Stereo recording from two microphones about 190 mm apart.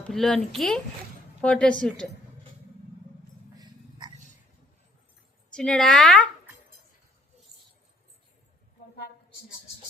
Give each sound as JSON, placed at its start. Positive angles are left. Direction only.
{"t": 0.0, "sound": "a woman's voice", "side_deg": 0}
{"t": 3.6, "sound": "a sound", "side_deg": -20}
{"t": 5.5, "sound": "speech", "side_deg": 5}